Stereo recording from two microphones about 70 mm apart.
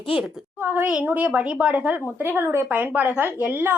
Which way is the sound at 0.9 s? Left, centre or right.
Centre.